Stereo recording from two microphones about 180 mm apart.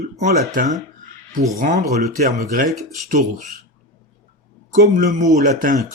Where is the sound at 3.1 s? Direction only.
40° right (ahead or behind).